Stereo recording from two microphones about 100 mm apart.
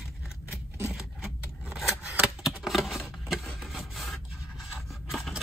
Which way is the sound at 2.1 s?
5° right (ahead or behind).